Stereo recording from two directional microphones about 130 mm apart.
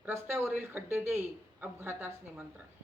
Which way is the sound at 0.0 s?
20° right (ahead or behind).